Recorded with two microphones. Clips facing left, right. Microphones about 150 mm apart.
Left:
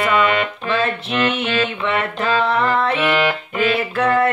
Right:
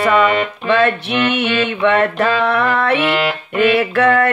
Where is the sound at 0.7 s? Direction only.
70° right (ahead or behind).